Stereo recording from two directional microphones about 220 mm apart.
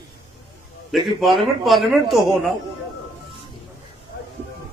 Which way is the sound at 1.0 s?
Centre (ahead or behind).